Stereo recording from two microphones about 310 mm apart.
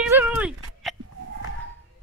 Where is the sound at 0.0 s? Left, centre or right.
Centre.